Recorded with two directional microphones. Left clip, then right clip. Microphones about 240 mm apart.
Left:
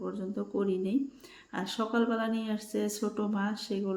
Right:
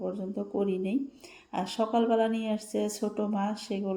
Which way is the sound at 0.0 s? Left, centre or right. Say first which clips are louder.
Right 2 dB; centre.